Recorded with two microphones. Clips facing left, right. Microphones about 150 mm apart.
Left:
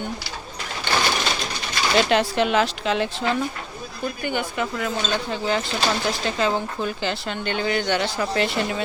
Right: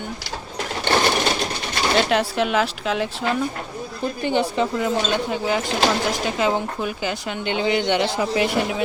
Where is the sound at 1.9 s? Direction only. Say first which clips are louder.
Left 1 dB; centre (ahead or behind).